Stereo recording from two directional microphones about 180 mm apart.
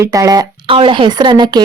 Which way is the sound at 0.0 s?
20° right (ahead or behind).